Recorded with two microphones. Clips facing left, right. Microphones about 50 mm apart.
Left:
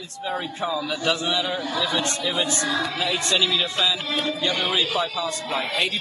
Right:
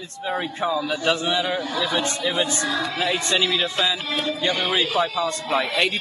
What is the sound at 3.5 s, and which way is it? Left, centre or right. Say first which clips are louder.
A man's voice: right 1 dB; centre.